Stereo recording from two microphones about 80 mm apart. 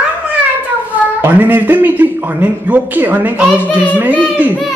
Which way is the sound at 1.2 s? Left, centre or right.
Right.